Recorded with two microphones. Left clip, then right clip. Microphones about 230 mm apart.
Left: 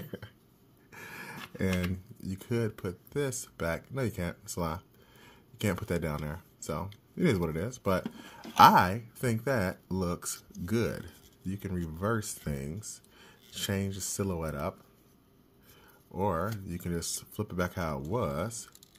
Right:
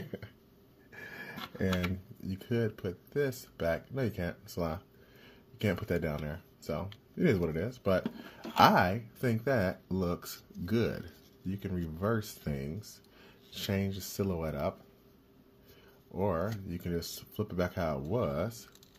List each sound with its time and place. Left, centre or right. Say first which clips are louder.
0.9 s a sound: left 1 dB; left
2.2 s speech: even; left
16.2 s speech: left 1 dB; centre